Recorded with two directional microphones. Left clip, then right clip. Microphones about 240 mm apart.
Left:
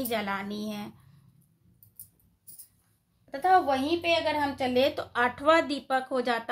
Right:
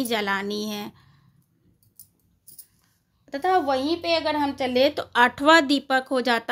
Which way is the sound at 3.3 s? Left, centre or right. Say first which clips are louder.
Right 1 dB; right.